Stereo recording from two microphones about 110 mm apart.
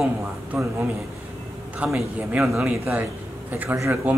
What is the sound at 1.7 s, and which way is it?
Speech, 10° right (ahead or behind).